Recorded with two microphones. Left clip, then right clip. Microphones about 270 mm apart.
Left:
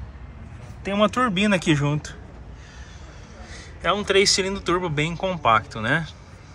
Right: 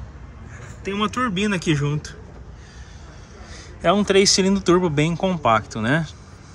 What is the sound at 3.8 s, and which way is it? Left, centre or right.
Speech, centre.